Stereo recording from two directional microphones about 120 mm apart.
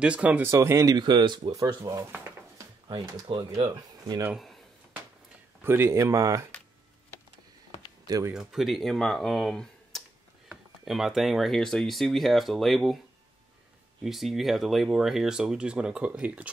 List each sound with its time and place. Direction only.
0.0 s speech: 10° right (ahead or behind)
0.5 s speech: 25° right (ahead or behind)
0.9 s speech: 40° right (ahead or behind)
3.3 s speech: 45° right (ahead or behind)
5.6 s speech: 20° right (ahead or behind)
8.3 s speech: 5° right (ahead or behind)
14.0 s speech: centre (ahead or behind)